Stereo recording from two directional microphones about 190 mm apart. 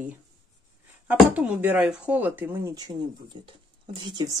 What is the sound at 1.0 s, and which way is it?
Speech, 5° right (ahead or behind).